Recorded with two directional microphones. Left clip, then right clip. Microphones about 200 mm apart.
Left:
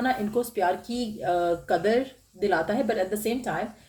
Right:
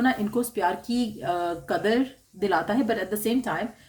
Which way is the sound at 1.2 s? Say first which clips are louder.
Left 6 dB; 40° right (ahead or behind).